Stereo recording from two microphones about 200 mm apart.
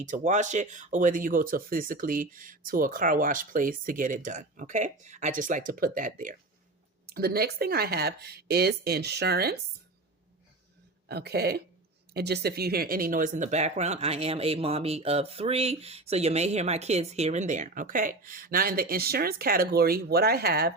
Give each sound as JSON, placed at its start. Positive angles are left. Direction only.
{"t": 0.0, "sound": "speech", "side_deg": -40}
{"t": 11.1, "sound": "speech", "side_deg": -55}